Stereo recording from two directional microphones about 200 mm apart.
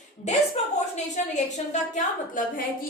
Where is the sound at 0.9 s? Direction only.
35° left (ahead or behind).